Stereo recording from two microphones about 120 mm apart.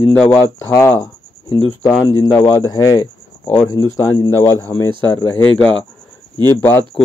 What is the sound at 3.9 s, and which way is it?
Speech, 30° left (ahead or behind).